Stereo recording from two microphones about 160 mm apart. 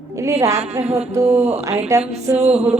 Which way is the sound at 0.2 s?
20° right (ahead or behind).